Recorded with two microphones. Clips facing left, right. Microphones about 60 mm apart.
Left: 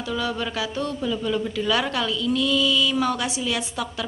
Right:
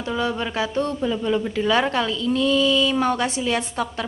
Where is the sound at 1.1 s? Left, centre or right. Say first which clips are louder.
Right 2 dB; right.